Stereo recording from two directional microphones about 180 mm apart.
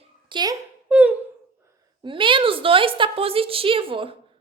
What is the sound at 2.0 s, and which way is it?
A woman's voice, 30° right (ahead or behind).